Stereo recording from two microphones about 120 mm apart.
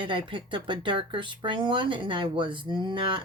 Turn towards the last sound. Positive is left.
turn(degrees=-45)  # may be behind; listen again after turning